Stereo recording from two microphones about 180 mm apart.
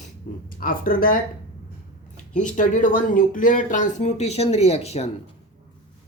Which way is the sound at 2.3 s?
45° left (ahead or behind).